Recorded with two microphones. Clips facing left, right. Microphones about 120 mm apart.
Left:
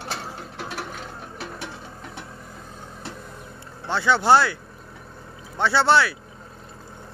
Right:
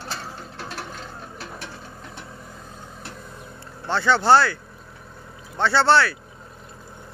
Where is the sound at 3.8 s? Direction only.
10° left (ahead or behind).